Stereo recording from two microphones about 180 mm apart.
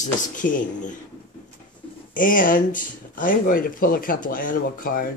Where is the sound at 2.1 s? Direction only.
50° left (ahead or behind).